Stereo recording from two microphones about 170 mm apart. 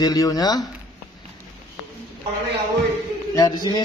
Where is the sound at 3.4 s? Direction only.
25° left (ahead or behind).